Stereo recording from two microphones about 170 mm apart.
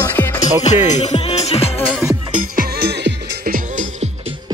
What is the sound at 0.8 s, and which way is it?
Speech, 40° left (ahead or behind).